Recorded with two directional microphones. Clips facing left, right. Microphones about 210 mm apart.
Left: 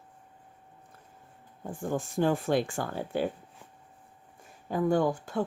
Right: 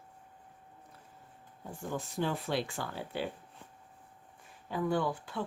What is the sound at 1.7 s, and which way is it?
Speech, 50° left (ahead or behind).